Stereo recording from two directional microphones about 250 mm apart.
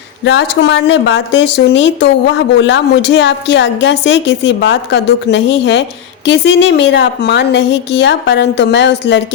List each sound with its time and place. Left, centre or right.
0.3 s speech: left